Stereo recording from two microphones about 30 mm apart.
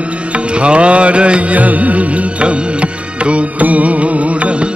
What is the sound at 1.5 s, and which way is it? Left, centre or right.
Music, right.